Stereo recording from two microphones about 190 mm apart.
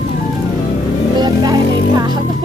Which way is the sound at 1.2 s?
20° right (ahead or behind).